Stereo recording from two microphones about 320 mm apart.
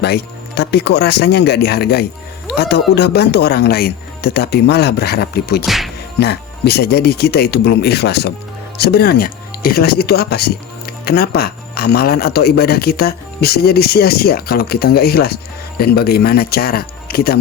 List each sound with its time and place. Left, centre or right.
0.0 s speech: left
5.6 s music: centre
6.1 s speech: left